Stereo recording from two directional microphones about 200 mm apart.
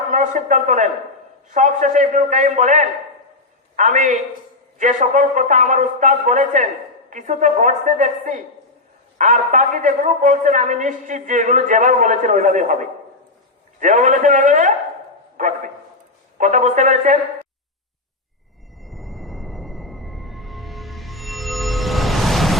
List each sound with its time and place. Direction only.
0.1 s a man's voice: 40° right (ahead or behind)
13.7 s a man's voice: 40° right (ahead or behind)
18.8 s music: centre (ahead or behind)